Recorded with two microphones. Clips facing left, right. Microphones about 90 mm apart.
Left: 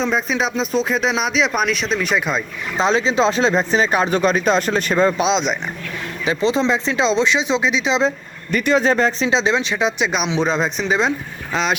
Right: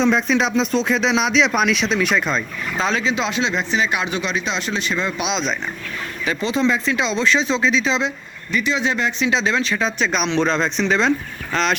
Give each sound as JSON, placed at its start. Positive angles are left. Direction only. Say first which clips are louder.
{"t": 0.0, "sound": "speech", "louder": "right 2 dB", "side_deg": 5}
{"t": 2.1, "sound": "speech", "louder": "even", "side_deg": 10}
{"t": 2.7, "sound": "speech", "louder": "left 4 dB", "side_deg": 25}
{"t": 8.5, "sound": "speech", "louder": "left 5 dB", "side_deg": 50}